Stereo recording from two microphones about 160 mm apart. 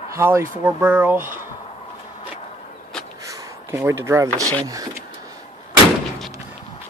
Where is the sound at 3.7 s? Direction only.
15° right (ahead or behind).